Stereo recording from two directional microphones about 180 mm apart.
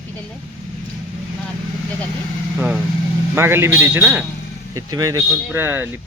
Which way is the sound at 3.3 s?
15° right (ahead or behind).